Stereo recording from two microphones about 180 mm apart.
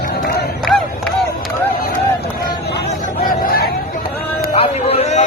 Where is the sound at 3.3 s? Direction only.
55° left (ahead or behind).